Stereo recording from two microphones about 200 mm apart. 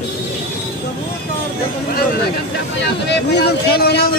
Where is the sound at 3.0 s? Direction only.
55° left (ahead or behind).